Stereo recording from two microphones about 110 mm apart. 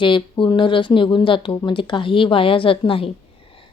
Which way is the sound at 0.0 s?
45° left (ahead or behind).